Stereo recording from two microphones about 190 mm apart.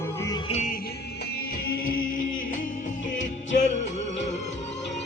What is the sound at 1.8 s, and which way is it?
Music, 45° left (ahead or behind).